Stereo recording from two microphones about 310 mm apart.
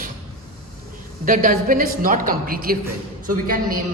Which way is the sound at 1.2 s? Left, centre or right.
Right.